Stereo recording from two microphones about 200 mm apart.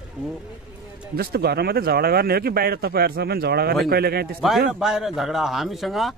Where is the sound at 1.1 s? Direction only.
50° right (ahead or behind).